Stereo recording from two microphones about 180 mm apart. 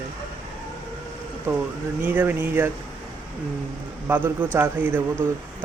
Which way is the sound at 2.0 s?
10° right (ahead or behind).